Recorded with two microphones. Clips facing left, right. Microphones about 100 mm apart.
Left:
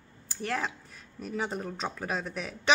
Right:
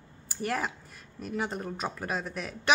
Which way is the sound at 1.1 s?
Centre (ahead or behind).